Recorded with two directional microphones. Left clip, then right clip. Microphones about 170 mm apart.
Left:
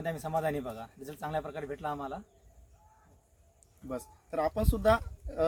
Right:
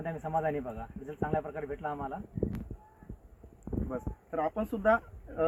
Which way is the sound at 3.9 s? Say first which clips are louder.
Left 3 dB; 35° left (ahead or behind).